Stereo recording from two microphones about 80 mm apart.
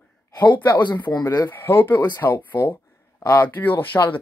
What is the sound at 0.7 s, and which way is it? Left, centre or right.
Speech, left.